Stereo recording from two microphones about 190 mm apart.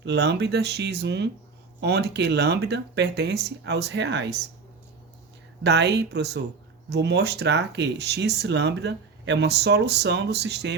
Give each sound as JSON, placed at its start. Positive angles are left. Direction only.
{"t": 0.0, "sound": "speech", "side_deg": -60}
{"t": 5.6, "sound": "speech", "side_deg": -65}